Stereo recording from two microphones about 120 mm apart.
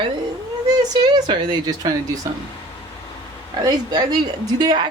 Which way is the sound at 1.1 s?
35° right (ahead or behind).